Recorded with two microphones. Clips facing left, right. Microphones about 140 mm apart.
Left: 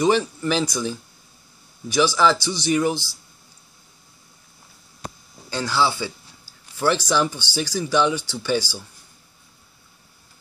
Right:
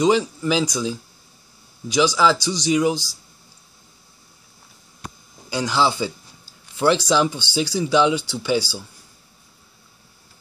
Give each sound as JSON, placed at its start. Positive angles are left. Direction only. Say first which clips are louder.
{"t": 0.0, "sound": "a man's voice", "louder": "right 1 dB", "side_deg": -10}
{"t": 5.5, "sound": "a man's voice", "louder": "right 2 dB", "side_deg": -15}